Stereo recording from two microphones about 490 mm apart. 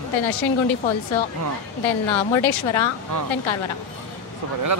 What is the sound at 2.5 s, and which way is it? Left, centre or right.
Speech, left.